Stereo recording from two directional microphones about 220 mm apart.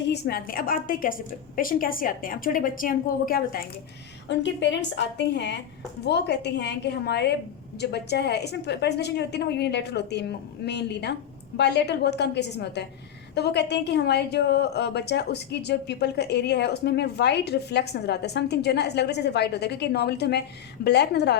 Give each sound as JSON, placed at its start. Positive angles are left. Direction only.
{"t": 0.1, "sound": "a woman's voice", "side_deg": 45}
{"t": 4.3, "sound": "a woman's voice", "side_deg": 55}